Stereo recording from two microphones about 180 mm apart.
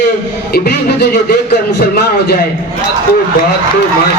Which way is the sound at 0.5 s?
60° left (ahead or behind).